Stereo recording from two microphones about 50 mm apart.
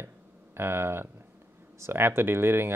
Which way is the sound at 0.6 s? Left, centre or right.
Right.